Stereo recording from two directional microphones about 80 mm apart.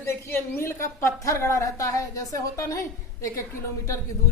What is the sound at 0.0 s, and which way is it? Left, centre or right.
A woman's voice, left.